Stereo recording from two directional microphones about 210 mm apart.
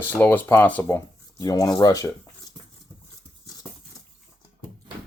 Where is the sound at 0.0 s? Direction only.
10° left (ahead or behind).